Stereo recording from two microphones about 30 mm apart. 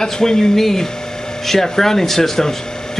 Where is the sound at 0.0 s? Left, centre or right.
Centre.